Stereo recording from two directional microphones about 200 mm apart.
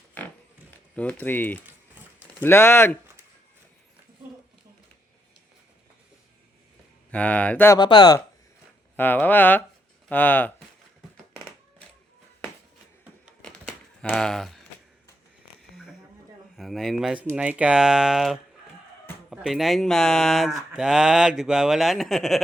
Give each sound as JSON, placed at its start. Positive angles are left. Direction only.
{"t": 0.9, "sound": "speech", "side_deg": 10}
{"t": 2.0, "sound": "a sound", "side_deg": -10}
{"t": 2.4, "sound": "speech", "side_deg": 10}
{"t": 7.1, "sound": "speech", "side_deg": 5}
{"t": 7.8, "sound": "speech", "side_deg": 20}
{"t": 9.0, "sound": "speech", "side_deg": 10}
{"t": 13.4, "sound": "crumpling", "side_deg": 5}
{"t": 15.7, "sound": "a sound", "side_deg": -5}
{"t": 16.6, "sound": "speech", "side_deg": 0}